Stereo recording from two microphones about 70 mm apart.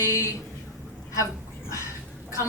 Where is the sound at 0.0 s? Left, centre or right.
Left.